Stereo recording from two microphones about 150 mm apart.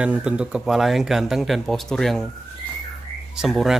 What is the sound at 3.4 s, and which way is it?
Speech, centre (ahead or behind).